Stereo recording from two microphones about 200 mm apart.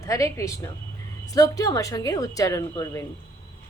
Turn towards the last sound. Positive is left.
turn(degrees=15)  # may be behind; listen again after turning